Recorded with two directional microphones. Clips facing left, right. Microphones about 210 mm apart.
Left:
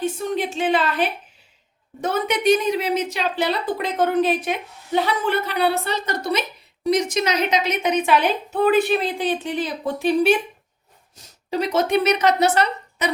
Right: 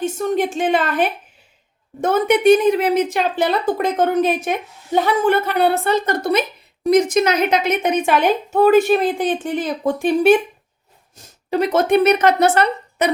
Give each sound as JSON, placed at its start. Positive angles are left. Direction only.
{"t": 0.0, "sound": "a woman's voice", "side_deg": -45}